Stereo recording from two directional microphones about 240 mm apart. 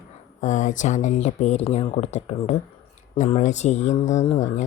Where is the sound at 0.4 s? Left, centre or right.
Left.